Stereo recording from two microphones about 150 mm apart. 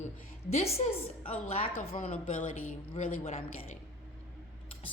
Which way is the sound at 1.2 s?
40° left (ahead or behind).